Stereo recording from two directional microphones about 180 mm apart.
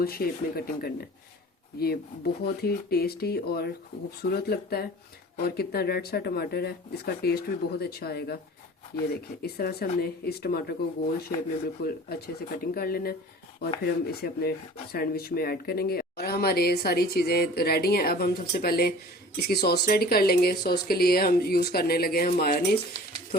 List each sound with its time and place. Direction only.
0.0 s speech: 55° left (ahead or behind)